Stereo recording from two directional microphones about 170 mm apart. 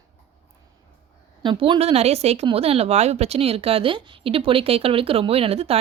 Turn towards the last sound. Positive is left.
turn(degrees=-35)  # may be behind; listen again after turning